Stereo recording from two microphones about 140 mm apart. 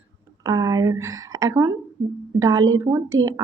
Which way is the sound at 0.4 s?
25° right (ahead or behind).